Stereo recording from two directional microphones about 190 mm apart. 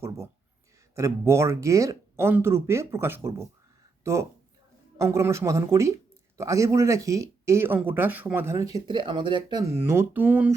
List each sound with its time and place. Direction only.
0.9 s speech: 15° right (ahead or behind)
8.7 s speech: 25° right (ahead or behind); by 10.5 s 10° right (ahead or behind)